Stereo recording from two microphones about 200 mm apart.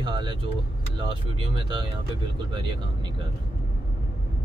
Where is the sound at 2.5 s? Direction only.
25° right (ahead or behind).